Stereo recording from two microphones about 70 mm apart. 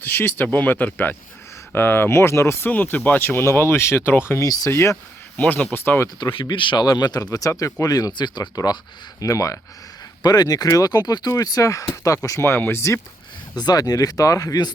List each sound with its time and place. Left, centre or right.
0.0 s speech: left
4.4 s speech: left
4.7 s speech: left
5.4 s speech: left
6.1 s speech: left
9.2 s speech: left
10.2 s speech: left
11.3 s speech: left
12.4 s speech: left
13.6 s speech: left